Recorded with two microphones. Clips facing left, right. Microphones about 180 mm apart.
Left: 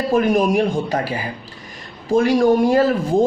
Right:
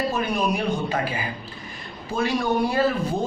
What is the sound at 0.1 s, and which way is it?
A man's voice, 45° left (ahead or behind).